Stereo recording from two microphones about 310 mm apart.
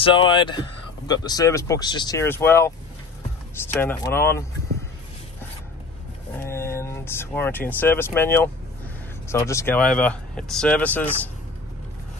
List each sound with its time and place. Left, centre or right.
0.0 s speech: centre
6.3 s speech: centre